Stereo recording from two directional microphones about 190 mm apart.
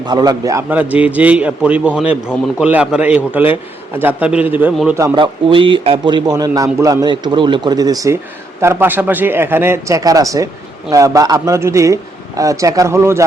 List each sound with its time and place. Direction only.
0.0 s a man's voice: 20° right (ahead or behind)